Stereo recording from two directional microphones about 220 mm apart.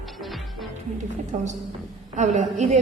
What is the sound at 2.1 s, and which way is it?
Speech, 30° right (ahead or behind).